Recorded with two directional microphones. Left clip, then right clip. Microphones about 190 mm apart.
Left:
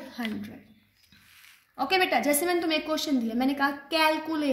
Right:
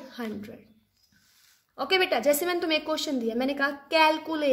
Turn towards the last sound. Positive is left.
turn(degrees=-55)  # may be behind; listen again after turning